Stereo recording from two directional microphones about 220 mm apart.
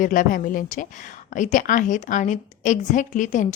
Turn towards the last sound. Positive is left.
turn(degrees=35)  # may be behind; listen again after turning